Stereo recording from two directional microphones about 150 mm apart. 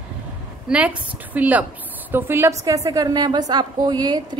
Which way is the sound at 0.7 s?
10° right (ahead or behind).